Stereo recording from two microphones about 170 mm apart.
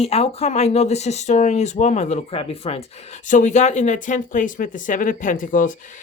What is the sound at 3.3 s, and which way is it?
Speech, 45° left (ahead or behind).